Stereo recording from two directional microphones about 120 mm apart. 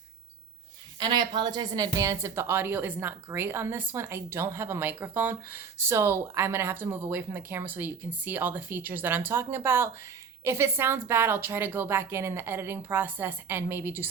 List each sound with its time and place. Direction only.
0.9 s speech: 40° right (ahead or behind); by 14.1 s 20° right (ahead or behind)